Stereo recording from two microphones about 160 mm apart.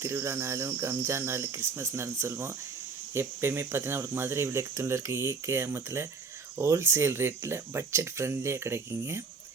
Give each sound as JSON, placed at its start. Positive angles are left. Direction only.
{"t": 0.0, "sound": "speech", "side_deg": -15}